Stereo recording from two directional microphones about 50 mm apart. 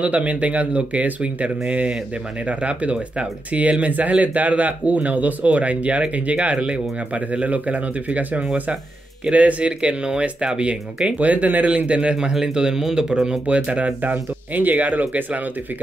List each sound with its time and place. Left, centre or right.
0.0 s speech: right
13.5 s speech: right